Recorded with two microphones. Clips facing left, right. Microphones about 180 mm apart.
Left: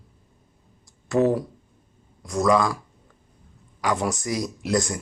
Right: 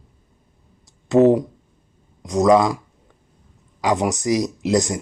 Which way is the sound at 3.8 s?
20° right (ahead or behind).